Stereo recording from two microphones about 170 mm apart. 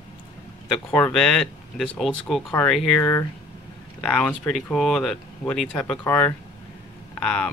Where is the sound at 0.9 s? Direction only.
5° left (ahead or behind).